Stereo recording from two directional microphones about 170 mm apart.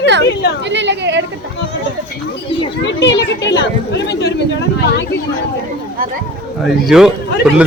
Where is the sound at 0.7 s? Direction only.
90° right.